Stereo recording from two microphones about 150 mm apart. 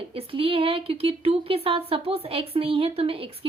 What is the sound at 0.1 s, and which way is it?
Speech, 40° right (ahead or behind).